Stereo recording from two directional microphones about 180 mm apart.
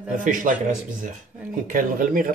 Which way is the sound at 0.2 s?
45° right (ahead or behind).